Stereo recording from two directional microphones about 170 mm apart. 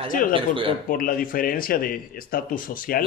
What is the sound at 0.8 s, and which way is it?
Speech, 55° left (ahead or behind).